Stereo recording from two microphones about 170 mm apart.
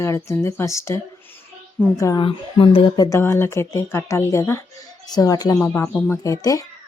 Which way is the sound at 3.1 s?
15° left (ahead or behind).